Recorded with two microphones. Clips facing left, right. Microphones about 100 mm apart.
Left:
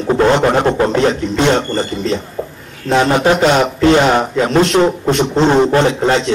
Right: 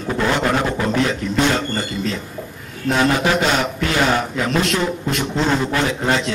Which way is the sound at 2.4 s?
80° left.